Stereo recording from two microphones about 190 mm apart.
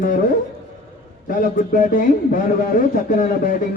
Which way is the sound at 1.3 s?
45° left (ahead or behind).